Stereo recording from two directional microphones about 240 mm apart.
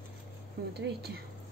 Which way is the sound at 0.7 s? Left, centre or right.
Right.